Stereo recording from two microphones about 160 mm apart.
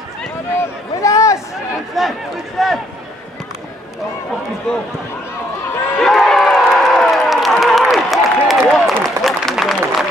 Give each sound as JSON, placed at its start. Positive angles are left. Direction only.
{"t": 0.6, "sound": "a sound", "side_deg": 20}
{"t": 2.0, "sound": "a man's voice", "side_deg": 0}
{"t": 5.9, "sound": "crowd", "side_deg": 0}